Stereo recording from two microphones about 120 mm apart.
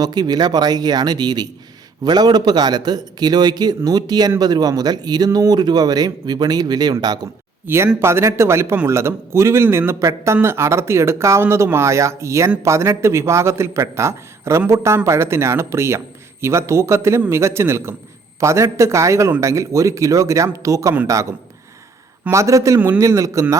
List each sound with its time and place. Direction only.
0.0 s speech: 35° right (ahead or behind)
7.9 s speech: 20° right (ahead or behind)
22.3 s speech: 25° right (ahead or behind)